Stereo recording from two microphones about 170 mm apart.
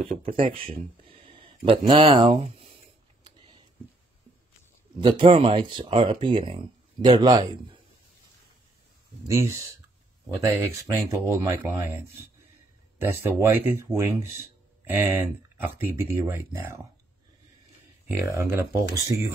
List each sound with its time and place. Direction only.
0.0 s speech: 35° right (ahead or behind)
1.0 s a sound: 30° right (ahead or behind)
4.9 s speech: 30° right (ahead or behind)
9.3 s speech: 15° right (ahead or behind)
13.0 s speech: 10° right (ahead or behind)
18.0 s speech: 15° right (ahead or behind)